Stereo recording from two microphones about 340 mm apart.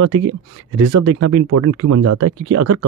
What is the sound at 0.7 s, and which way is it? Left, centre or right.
Speech, right.